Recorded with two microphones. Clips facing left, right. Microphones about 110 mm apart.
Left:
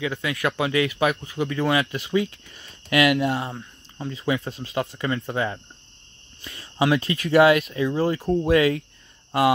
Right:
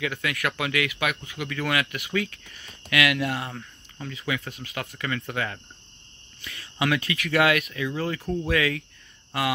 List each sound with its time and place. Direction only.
0.0 s speech: 25° left (ahead or behind)